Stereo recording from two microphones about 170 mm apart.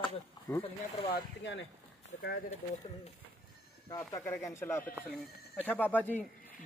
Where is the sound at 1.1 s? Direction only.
90° left.